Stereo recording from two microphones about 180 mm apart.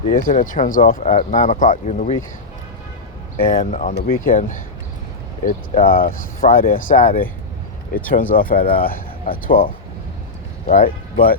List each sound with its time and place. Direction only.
0.1 s speech: 50° left (ahead or behind)
3.4 s speech: 50° left (ahead or behind)
10.7 s speech: 45° left (ahead or behind)